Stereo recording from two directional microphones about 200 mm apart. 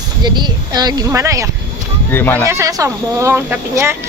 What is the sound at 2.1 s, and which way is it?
Speech, 10° left (ahead or behind).